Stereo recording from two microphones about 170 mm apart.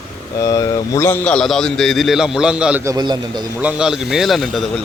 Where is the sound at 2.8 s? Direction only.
20° right (ahead or behind).